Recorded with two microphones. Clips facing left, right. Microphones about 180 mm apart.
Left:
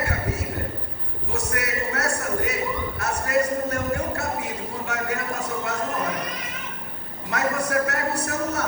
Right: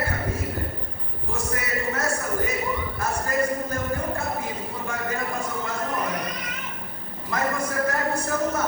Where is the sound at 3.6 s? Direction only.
70° left (ahead or behind).